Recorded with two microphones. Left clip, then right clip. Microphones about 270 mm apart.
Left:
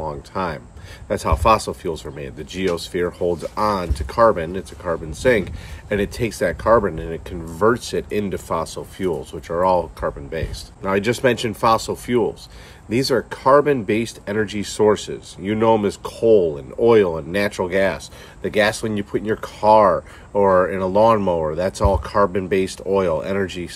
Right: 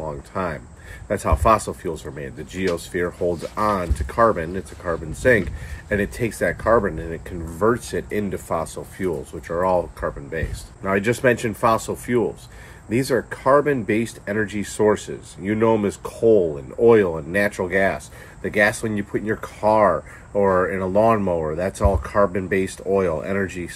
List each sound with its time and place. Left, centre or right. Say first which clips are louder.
0.3 s speech: even; centre